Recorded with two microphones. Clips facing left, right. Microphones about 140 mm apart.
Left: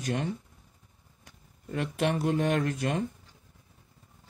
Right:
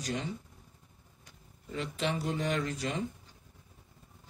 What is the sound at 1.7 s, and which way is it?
Speech, 55° left (ahead or behind).